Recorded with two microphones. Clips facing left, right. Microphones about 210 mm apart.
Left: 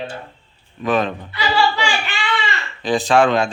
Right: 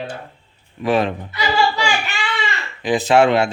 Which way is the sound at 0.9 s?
30° right (ahead or behind).